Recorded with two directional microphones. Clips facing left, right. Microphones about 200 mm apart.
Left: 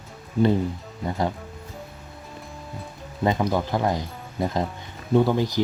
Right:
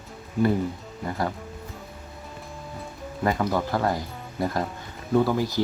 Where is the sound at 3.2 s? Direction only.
20° left (ahead or behind).